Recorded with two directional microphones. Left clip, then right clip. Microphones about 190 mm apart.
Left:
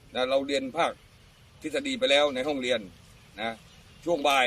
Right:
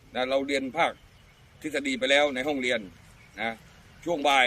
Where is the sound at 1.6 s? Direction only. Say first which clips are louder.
Right 1 dB; 25° right (ahead or behind).